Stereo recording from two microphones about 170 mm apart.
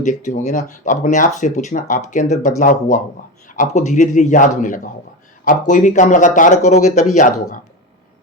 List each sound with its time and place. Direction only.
0.0 s speech: 45° left (ahead or behind)